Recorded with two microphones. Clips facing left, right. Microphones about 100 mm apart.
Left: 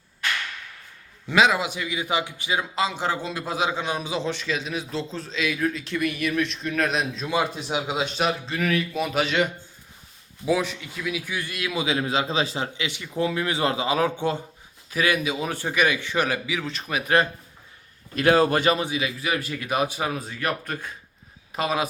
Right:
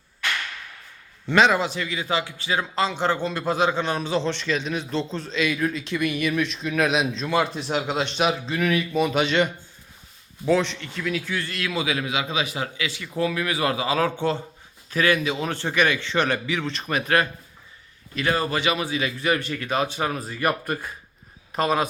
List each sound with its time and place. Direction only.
1.3 s a man's voice: 5° left (ahead or behind)
7.1 s a man's voice: 10° left (ahead or behind)
11.9 s a man's voice: 30° left (ahead or behind); by 17.0 s centre (ahead or behind)
18.1 s a man's voice: 45° left (ahead or behind)
18.9 s a man's voice: 5° left (ahead or behind)